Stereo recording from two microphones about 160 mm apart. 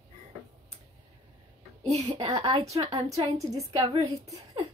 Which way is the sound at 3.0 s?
45° right (ahead or behind).